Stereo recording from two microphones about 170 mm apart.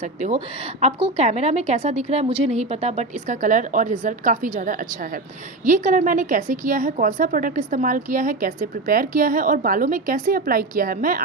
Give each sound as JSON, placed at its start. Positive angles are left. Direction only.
{"t": 0.2, "sound": "a woman's voice", "side_deg": -40}